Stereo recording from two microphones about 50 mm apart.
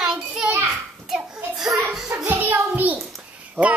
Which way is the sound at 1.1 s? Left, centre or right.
Centre.